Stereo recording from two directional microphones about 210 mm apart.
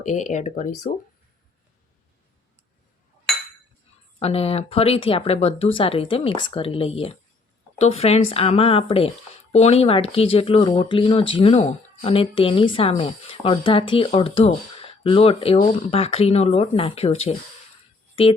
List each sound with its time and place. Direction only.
0.0 s speech: 35° left (ahead or behind)
4.2 s speech: 30° left (ahead or behind)